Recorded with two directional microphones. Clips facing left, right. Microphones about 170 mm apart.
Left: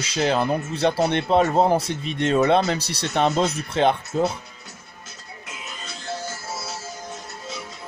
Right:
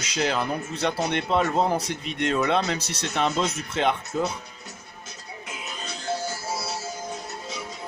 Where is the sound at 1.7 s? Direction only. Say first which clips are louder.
Left 3 dB; 30° left (ahead or behind).